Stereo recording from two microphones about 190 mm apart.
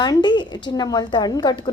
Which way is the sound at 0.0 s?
25° left (ahead or behind).